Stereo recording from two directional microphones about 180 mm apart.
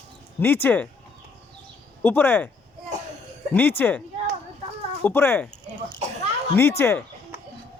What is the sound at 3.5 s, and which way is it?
Speech, 10° left (ahead or behind).